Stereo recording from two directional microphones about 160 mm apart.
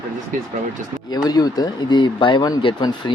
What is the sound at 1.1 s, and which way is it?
Speech, 25° left (ahead or behind).